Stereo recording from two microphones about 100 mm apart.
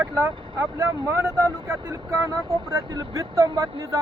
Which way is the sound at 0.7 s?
30° right (ahead or behind).